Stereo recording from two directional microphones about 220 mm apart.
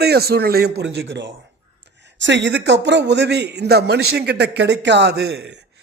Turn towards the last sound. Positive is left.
turn(degrees=-50)  # may be behind; listen again after turning